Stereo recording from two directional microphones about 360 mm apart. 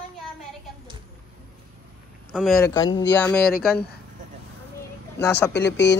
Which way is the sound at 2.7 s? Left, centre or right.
Centre.